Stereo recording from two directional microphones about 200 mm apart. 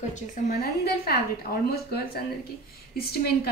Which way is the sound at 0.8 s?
50° left (ahead or behind).